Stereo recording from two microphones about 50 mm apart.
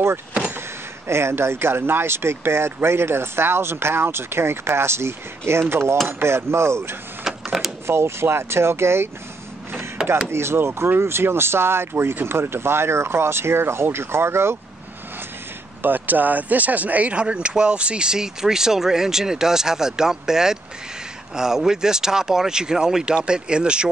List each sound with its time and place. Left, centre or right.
0.5 s speech: right
7.2 s a sound: centre
7.8 s speech: right
10.0 s mechanisms: centre
10.3 s speech: right
15.8 s speech: right; by 23.9 s centre